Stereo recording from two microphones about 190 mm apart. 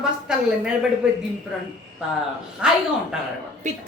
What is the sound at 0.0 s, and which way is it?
Speech, 5° right (ahead or behind).